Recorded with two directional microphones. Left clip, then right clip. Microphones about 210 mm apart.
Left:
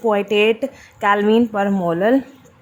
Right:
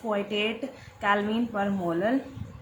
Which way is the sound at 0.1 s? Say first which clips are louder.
Left 11 dB; 50° left (ahead or behind).